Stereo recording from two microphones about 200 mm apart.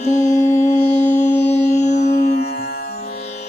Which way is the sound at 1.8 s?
35° left (ahead or behind).